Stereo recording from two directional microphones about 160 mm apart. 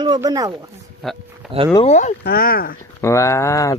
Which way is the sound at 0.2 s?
20° right (ahead or behind).